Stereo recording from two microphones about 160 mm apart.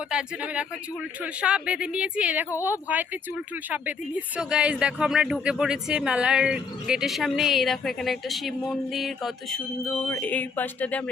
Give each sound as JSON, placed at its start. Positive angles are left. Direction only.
{"t": 0.1, "sound": "speech", "side_deg": -5}
{"t": 10.1, "sound": "speech", "side_deg": 10}